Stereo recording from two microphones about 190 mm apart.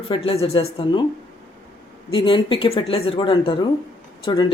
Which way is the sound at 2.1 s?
25° left (ahead or behind).